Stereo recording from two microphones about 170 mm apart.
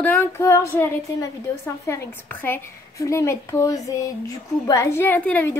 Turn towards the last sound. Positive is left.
turn(degrees=10)  # may be behind; listen again after turning